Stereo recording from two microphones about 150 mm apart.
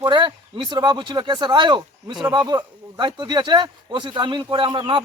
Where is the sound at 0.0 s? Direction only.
30° right (ahead or behind).